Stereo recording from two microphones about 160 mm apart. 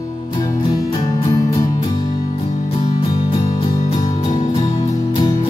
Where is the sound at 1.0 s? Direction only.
20° left (ahead or behind).